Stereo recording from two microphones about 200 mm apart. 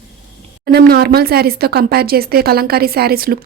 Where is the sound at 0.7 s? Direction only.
50° right (ahead or behind).